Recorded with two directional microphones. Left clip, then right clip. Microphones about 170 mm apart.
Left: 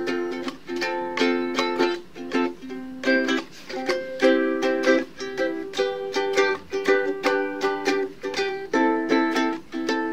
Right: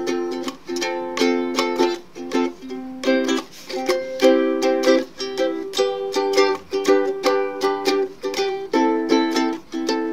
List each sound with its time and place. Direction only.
0.0 s music: 25° right (ahead or behind)